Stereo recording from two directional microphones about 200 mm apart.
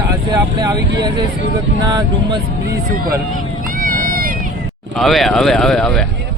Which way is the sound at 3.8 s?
45° right (ahead or behind).